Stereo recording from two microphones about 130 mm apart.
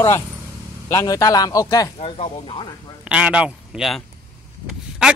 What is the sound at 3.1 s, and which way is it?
Speech, 10° right (ahead or behind).